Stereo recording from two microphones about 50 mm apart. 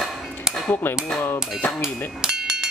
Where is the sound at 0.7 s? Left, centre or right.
Left.